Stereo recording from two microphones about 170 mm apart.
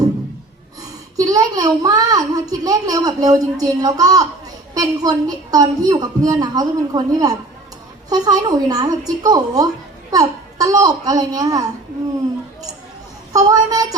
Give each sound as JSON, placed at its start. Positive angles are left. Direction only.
{"t": 0.8, "sound": "a sound", "side_deg": -20}
{"t": 4.7, "sound": "a woman's voice", "side_deg": -20}
{"t": 13.3, "sound": "a woman's voice", "side_deg": -20}